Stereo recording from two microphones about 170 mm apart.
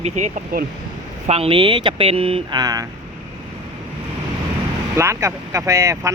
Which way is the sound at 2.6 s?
20° right (ahead or behind).